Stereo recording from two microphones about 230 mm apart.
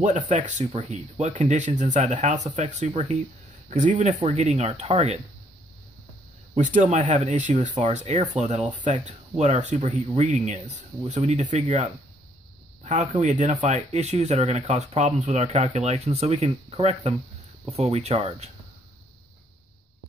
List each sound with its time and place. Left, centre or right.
0.3 s speech: right
6.5 s speech: right